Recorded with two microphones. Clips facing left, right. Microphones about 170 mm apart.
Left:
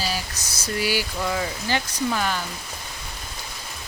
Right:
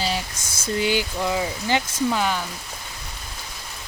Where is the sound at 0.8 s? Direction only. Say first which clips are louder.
Right 2 dB; 20° right (ahead or behind).